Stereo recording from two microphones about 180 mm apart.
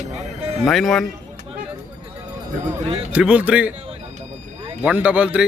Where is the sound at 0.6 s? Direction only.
Centre (ahead or behind).